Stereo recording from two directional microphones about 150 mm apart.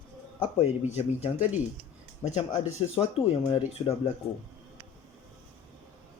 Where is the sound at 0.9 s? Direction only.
45° left (ahead or behind).